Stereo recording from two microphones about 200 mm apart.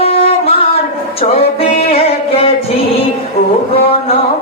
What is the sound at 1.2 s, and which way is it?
Music, 30° left (ahead or behind).